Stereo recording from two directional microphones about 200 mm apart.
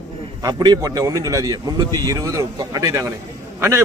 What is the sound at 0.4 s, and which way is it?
Speech, 20° right (ahead or behind).